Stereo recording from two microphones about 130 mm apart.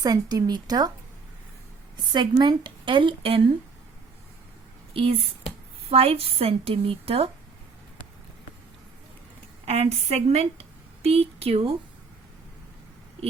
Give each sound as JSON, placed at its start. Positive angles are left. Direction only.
{"t": 0.0, "sound": "a woman's voice", "side_deg": -30}
{"t": 2.1, "sound": "a woman's voice", "side_deg": -35}
{"t": 5.9, "sound": "a woman's voice", "side_deg": -50}
{"t": 9.6, "sound": "a woman's voice", "side_deg": -55}